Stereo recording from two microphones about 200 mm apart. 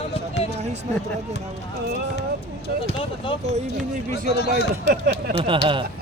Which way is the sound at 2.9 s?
25° left (ahead or behind).